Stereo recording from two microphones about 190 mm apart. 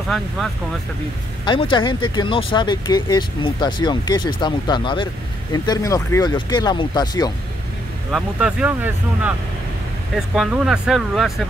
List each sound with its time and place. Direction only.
1.4 s speech: 25° left (ahead or behind)
8.1 s speech: 5° right (ahead or behind)